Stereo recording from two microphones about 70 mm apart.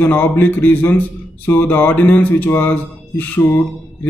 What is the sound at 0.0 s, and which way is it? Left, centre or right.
A man's voice, left.